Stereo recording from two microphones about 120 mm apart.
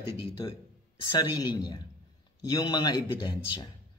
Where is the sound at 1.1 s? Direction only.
40° left (ahead or behind).